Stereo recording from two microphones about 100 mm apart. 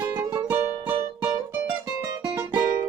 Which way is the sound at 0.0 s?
20° right (ahead or behind).